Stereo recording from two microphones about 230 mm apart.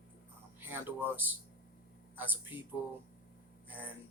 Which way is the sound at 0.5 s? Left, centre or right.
Centre.